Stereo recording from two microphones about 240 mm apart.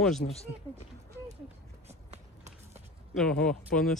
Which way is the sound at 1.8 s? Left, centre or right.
Right.